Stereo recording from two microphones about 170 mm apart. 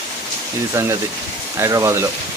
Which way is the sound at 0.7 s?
15° right (ahead or behind).